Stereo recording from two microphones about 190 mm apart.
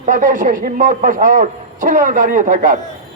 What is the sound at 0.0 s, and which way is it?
A man's voice, 40° right (ahead or behind).